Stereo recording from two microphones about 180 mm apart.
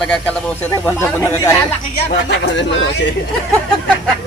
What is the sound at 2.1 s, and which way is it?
Speech, 80° left.